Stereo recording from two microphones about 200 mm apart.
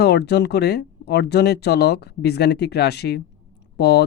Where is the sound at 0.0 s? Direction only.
55° left (ahead or behind).